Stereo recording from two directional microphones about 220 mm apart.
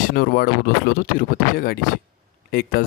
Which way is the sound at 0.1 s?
45° left (ahead or behind).